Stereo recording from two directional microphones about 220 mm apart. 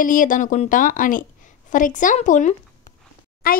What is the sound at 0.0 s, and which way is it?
A woman's voice, 35° left (ahead or behind).